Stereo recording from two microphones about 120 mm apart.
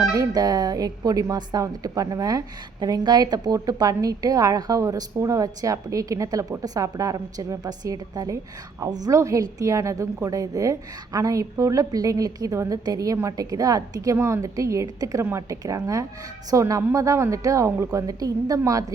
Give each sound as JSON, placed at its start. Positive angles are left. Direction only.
{"t": 0.1, "sound": "a woman's voice", "side_deg": -30}